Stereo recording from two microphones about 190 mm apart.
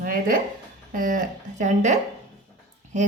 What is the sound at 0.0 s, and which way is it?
A woman's voice, 45° right (ahead or behind).